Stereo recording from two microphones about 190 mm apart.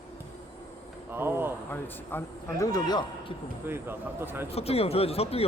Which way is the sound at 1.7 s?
15° left (ahead or behind).